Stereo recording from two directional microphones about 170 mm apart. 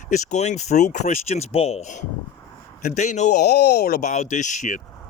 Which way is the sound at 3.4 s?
75° left (ahead or behind).